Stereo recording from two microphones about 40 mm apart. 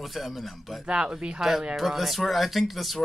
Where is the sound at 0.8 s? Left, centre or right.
Right.